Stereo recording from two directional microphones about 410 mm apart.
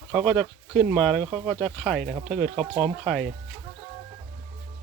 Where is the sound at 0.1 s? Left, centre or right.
Centre.